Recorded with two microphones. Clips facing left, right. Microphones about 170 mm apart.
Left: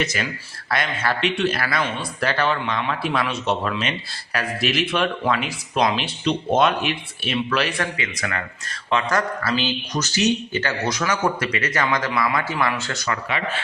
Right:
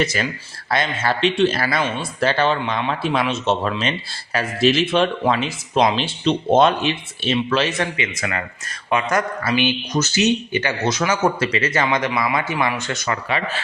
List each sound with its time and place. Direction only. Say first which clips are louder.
0.0 s speech: right 4 dB; 35° right (ahead or behind); by 13.1 s 20° right (ahead or behind)